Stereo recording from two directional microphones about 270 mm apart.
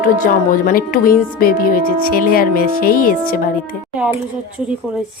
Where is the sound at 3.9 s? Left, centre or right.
Centre.